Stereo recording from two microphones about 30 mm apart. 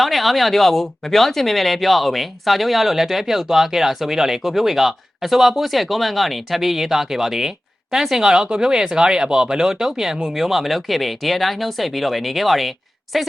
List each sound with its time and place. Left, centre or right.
0.0 s speech: centre